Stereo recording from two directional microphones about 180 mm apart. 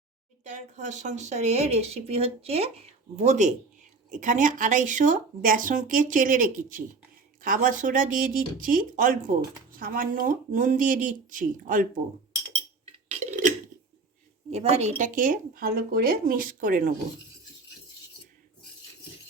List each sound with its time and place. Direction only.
0.4 s speech: 45° right (ahead or behind)
14.5 s speech: 35° right (ahead or behind)